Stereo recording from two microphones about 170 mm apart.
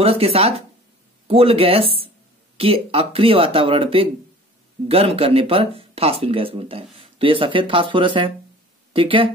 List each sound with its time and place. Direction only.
0.0 s speech: 35° right (ahead or behind)